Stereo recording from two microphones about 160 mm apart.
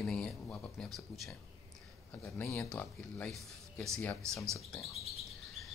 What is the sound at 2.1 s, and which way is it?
Speech, 15° left (ahead or behind).